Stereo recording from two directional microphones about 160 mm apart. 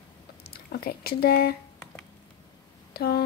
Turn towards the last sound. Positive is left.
turn(degrees=75)  # may be behind; listen again after turning